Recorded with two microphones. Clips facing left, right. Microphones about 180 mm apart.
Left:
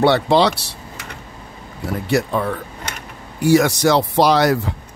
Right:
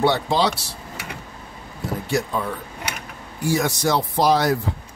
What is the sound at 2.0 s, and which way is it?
Speech, 70° left (ahead or behind).